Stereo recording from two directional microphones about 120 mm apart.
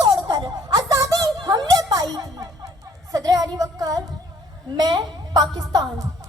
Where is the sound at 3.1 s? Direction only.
30° right (ahead or behind).